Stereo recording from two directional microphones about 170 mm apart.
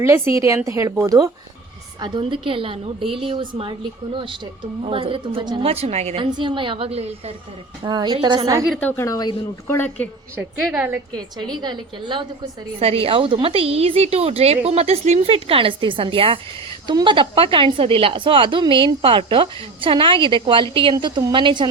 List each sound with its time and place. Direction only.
0.0 s a woman's voice: 15° right (ahead or behind); by 6.2 s 40° right (ahead or behind)
6.3 s a woman's voice: 30° right (ahead or behind)
7.9 s a woman's voice: 25° right (ahead or behind)
8.8 s speech: 15° left (ahead or behind)
10.7 s a woman's voice: 10° right (ahead or behind)
11.5 s a woman's voice: 25° right (ahead or behind)